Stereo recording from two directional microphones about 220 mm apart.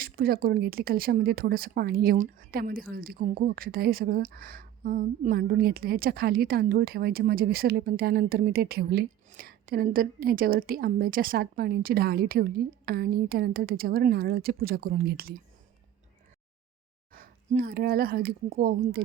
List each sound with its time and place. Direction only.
0.0 s speech: 45° right (ahead or behind)
17.1 s speech: 40° right (ahead or behind)